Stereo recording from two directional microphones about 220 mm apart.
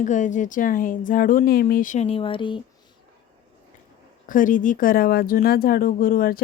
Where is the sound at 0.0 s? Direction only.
35° left (ahead or behind).